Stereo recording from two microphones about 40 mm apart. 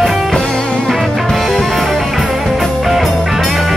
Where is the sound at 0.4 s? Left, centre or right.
Centre.